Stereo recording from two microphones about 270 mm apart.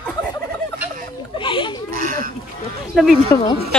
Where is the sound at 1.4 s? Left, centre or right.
Centre.